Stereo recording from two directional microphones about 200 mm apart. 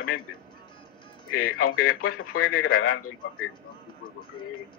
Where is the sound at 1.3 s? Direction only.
90° left.